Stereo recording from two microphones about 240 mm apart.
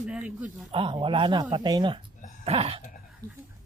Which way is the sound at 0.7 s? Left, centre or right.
Right.